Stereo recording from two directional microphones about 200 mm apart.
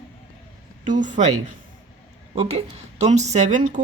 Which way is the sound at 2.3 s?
30° right (ahead or behind).